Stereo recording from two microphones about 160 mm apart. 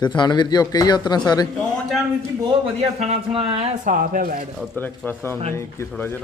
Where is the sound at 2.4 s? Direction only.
40° right (ahead or behind).